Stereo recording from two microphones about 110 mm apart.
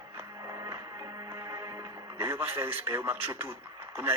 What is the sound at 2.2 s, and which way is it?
A man's voice, 25° right (ahead or behind).